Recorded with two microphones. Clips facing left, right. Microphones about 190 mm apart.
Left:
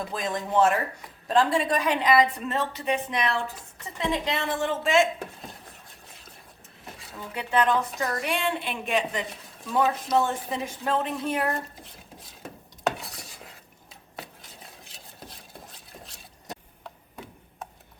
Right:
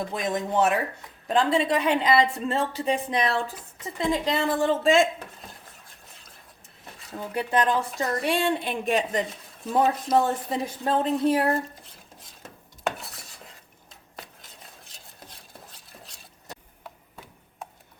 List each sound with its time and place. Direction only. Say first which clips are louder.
0.1 s a woman's voice: right 1 dB; 20° right (ahead or behind)
7.3 s a woman's voice: even; 35° right (ahead or behind)